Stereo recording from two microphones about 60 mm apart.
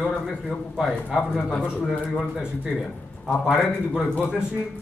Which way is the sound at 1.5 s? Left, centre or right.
Centre.